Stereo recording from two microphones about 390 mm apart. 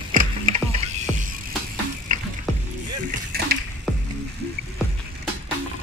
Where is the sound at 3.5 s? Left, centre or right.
Right.